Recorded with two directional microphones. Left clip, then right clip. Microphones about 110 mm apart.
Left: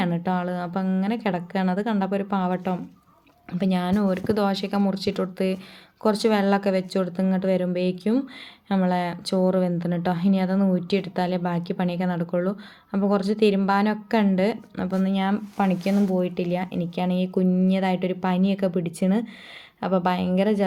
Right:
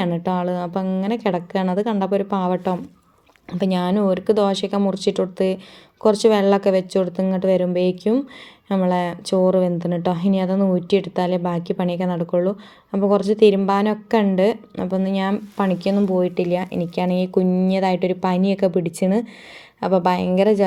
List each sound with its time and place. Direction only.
0.0 s a woman's voice: 30° right (ahead or behind)